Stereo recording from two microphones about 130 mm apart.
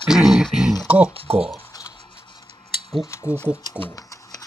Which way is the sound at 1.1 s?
45° right (ahead or behind).